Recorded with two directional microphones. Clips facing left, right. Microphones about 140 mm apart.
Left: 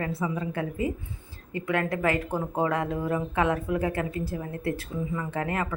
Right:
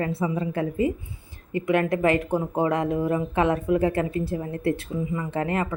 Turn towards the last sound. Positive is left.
turn(degrees=-20)  # may be behind; listen again after turning